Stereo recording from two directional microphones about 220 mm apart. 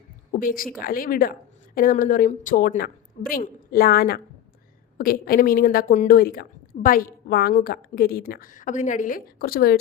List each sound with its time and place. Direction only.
0.3 s a woman's voice: 40° left (ahead or behind)